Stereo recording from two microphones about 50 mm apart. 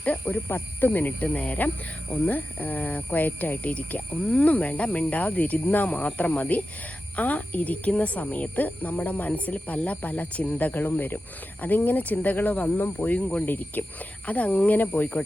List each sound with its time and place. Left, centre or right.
0.0 s speech: left
0.4 s speech: left
12.8 s speech: left
13.1 s speech: left